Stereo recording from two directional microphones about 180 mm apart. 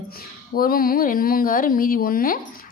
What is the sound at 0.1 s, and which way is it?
A woman's voice, 55° left (ahead or behind).